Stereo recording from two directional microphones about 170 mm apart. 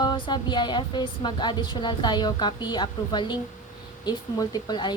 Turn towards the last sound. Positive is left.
turn(degrees=25)  # may be behind; listen again after turning